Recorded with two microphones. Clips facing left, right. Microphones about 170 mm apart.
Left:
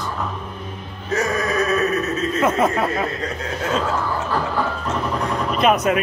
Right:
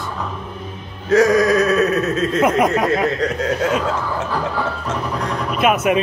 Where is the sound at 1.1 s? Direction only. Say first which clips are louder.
Right 9 dB; 90° right.